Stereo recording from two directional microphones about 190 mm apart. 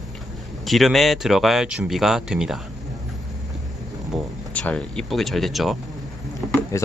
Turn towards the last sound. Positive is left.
turn(degrees=15)  # may be behind; listen again after turning